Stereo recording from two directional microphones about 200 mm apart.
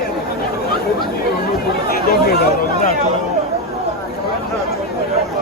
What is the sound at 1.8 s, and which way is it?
Chatter, 50° left (ahead or behind).